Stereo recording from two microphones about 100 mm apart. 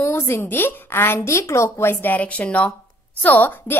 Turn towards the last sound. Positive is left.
turn(degrees=20)  # may be behind; listen again after turning